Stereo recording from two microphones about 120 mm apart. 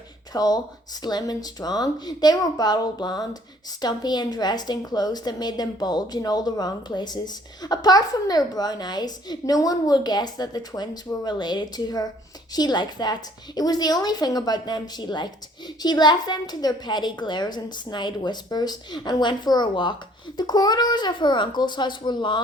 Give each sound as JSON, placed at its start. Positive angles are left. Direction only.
{"t": 0.3, "sound": "a woman's voice", "side_deg": 30}